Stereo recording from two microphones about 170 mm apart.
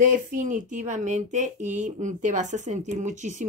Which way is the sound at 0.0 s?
50° right (ahead or behind).